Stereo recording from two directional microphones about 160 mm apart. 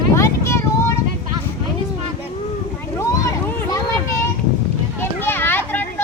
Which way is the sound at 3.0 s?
20° left (ahead or behind).